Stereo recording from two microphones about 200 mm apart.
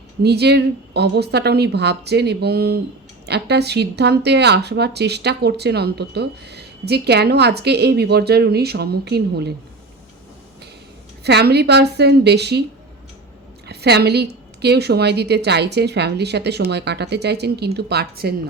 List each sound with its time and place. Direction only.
0.2 s speech: 55° right (ahead or behind)
11.2 s speech: 55° right (ahead or behind)
13.7 s a woman's voice: 55° right (ahead or behind)